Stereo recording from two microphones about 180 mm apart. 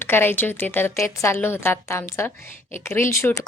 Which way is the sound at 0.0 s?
10° left (ahead or behind).